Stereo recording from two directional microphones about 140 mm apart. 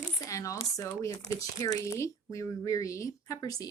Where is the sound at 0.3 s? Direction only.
25° left (ahead or behind).